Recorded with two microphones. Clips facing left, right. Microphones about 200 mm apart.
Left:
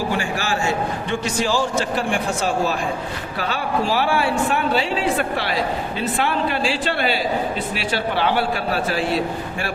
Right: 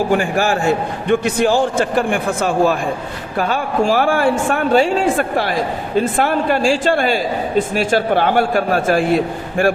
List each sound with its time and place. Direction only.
0.1 s a man's voice: 50° right (ahead or behind)